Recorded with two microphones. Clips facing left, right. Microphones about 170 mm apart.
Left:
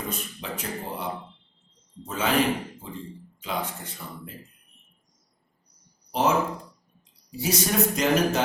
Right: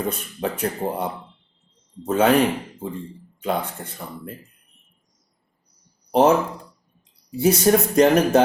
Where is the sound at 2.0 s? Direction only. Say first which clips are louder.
Right 10 dB; 60° right (ahead or behind).